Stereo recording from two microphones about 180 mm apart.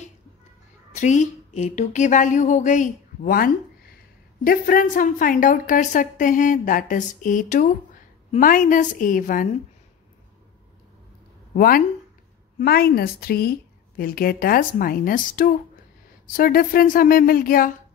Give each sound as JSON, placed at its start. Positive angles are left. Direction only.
{"t": 0.9, "sound": "a woman's voice", "side_deg": 40}
{"t": 11.5, "sound": "a woman's voice", "side_deg": 55}